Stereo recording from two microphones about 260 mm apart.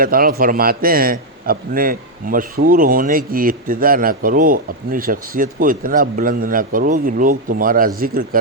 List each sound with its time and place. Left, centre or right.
0.0 s a man's voice: right